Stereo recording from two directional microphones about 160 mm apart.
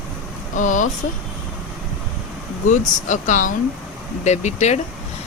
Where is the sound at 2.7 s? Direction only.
50° left (ahead or behind).